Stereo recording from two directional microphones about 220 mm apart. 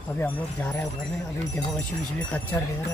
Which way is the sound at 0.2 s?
10° left (ahead or behind).